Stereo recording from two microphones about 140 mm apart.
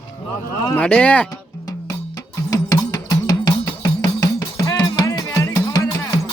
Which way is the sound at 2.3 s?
25° left (ahead or behind).